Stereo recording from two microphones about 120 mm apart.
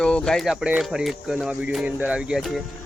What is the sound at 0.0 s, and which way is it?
Speech, 5° left (ahead or behind).